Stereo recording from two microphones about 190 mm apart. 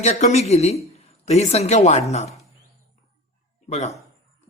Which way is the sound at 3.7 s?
35° left (ahead or behind).